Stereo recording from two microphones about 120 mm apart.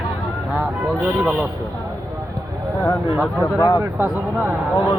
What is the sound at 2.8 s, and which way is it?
Speech, 30° left (ahead or behind).